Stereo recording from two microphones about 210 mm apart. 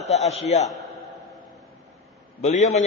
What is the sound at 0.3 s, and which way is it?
Speech, 30° left (ahead or behind).